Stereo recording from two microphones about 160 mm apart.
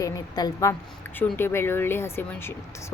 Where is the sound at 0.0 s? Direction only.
20° left (ahead or behind).